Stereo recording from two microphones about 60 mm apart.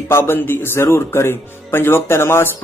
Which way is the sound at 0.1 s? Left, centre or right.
Left.